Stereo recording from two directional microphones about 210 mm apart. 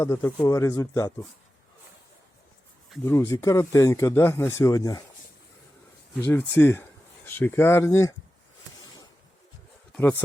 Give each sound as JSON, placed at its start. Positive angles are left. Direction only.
{"t": 0.0, "sound": "speech", "side_deg": 15}
{"t": 3.0, "sound": "speech", "side_deg": 15}
{"t": 6.2, "sound": "speech", "side_deg": 10}
{"t": 9.9, "sound": "speech", "side_deg": 10}